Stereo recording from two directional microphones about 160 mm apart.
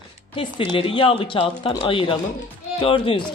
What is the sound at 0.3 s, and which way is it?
Speech, 30° left (ahead or behind).